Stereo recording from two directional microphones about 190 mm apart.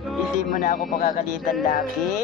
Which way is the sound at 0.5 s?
45° left (ahead or behind).